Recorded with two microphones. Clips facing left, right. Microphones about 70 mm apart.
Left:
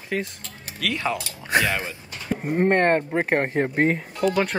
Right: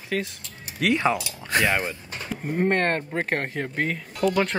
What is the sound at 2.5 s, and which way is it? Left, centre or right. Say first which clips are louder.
Speech: left 4 dB; centre.